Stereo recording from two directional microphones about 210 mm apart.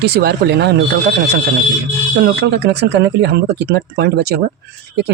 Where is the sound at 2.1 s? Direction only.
55° right (ahead or behind).